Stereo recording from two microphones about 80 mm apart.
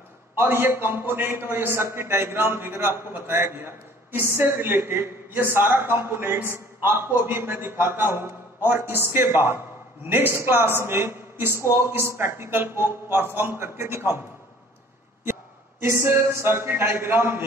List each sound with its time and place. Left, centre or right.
0.4 s a man's voice: right
15.8 s a man's voice: right